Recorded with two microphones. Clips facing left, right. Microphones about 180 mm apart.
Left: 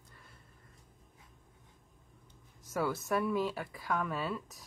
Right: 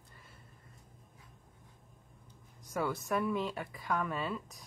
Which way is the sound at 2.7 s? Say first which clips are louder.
Left 1 dB; 5° left (ahead or behind).